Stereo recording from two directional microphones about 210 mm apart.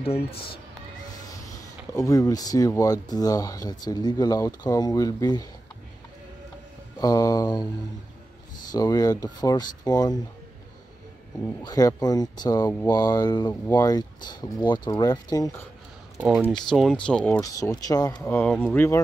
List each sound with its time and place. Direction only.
0.0 s speech: 25° left (ahead or behind)
2.0 s speech: 15° left (ahead or behind)
7.0 s speech: 15° left (ahead or behind)
8.7 s speech: 15° left (ahead or behind)
11.6 s speech: 20° left (ahead or behind)
16.2 s speech: 5° right (ahead or behind)
17.4 s speech: 15° left (ahead or behind)